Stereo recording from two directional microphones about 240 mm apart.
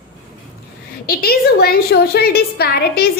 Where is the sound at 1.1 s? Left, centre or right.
Left.